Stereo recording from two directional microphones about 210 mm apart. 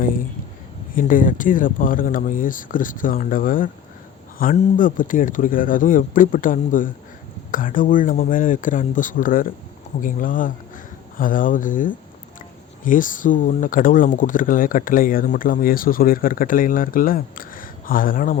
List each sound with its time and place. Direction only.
0.9 s speech: 40° left (ahead or behind)